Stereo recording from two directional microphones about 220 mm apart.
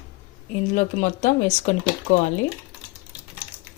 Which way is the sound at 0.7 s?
35° left (ahead or behind).